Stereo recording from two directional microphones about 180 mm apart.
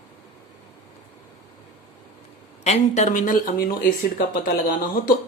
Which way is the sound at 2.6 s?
40° left (ahead or behind).